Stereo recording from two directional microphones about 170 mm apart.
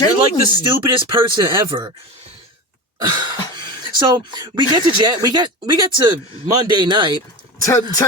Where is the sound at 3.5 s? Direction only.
25° right (ahead or behind).